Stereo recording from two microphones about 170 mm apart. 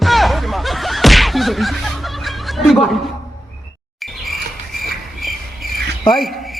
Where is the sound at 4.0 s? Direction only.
Centre (ahead or behind).